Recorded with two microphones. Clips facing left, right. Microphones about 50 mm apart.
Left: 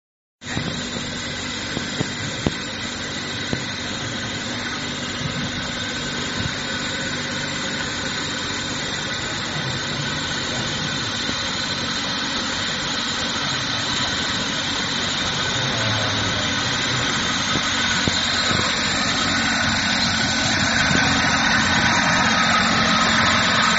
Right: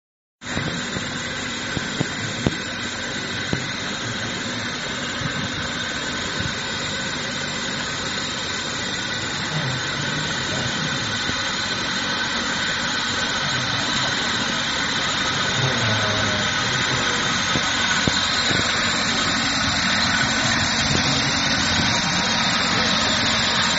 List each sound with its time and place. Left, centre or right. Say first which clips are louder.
16.8 s vehicle: right 1 dB; centre
19.1 s engine: left 1 dB; centre
20.5 s vehicle: left 3 dB; centre
23.1 s vehicle: left 4 dB; left
23.4 s vehicle: left 3 dB; centre